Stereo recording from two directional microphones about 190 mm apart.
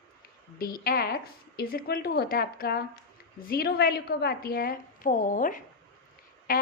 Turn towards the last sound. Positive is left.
turn(degrees=45)  # may be behind; listen again after turning